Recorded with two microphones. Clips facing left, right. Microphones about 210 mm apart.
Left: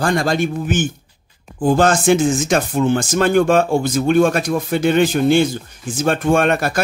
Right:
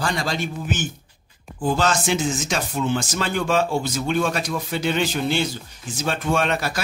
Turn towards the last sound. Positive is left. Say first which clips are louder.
# left 7 dB
turn(degrees=55)  # may be behind; listen again after turning